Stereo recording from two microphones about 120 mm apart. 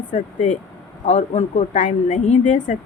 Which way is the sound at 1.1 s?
70° left (ahead or behind).